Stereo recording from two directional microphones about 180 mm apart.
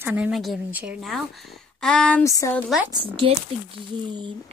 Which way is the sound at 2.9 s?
30° right (ahead or behind).